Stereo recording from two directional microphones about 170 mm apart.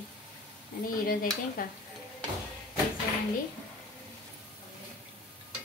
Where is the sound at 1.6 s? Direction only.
55° left (ahead or behind).